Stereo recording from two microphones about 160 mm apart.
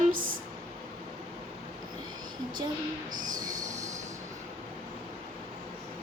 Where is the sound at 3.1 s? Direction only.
55° right (ahead or behind).